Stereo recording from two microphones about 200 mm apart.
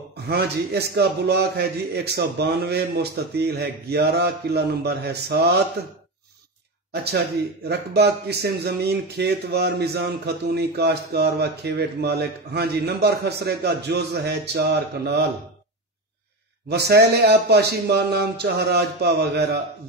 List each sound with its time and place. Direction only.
0.3 s speech: 55° right (ahead or behind)
6.9 s speech: 55° right (ahead or behind)
16.6 s speech: 55° right (ahead or behind)